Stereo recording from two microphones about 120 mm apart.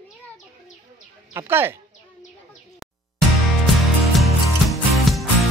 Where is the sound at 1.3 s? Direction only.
20° right (ahead or behind).